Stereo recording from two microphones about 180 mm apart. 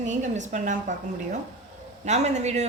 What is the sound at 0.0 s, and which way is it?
A woman's voice, 40° right (ahead or behind).